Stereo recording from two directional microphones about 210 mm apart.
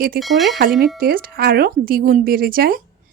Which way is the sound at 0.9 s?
45° right (ahead or behind).